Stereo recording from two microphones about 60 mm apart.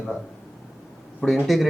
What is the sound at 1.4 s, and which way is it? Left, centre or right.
Speech, centre.